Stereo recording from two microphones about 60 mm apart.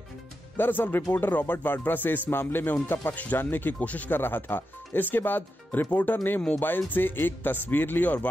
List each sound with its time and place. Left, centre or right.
0.6 s speech: left
4.2 s speech: left